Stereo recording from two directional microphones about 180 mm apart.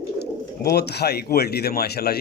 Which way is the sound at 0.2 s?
65° left (ahead or behind).